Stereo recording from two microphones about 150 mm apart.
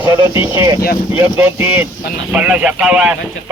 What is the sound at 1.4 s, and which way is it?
Speech, 15° right (ahead or behind).